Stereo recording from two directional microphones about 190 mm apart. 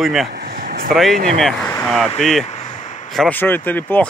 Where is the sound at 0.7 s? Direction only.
50° right (ahead or behind).